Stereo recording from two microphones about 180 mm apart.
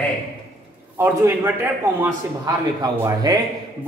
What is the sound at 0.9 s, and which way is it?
Speech, 15° right (ahead or behind).